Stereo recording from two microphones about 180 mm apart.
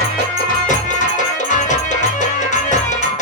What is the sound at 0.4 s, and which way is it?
Music, 45° left (ahead or behind).